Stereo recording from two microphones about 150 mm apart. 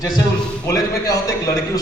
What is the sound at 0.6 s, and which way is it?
Speech, 20° left (ahead or behind).